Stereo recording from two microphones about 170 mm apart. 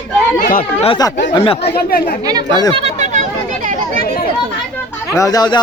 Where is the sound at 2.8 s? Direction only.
40° right (ahead or behind).